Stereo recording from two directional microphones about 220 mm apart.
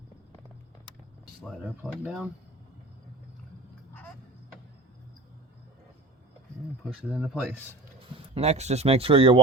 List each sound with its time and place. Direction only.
1.5 s speech: centre (ahead or behind)
7.1 s speech: centre (ahead or behind)
8.4 s speech: 30° right (ahead or behind)